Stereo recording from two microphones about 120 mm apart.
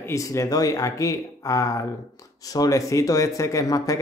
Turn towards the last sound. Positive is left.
turn(degrees=30)  # may be behind; listen again after turning